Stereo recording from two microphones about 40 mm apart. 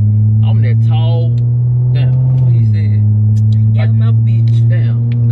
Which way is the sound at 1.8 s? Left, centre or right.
Centre.